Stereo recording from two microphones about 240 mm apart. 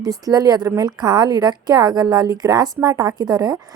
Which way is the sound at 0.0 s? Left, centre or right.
Centre.